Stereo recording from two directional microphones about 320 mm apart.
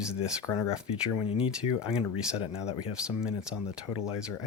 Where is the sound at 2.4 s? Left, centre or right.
Centre.